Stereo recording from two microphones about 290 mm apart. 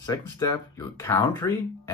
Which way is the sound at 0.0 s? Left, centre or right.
Centre.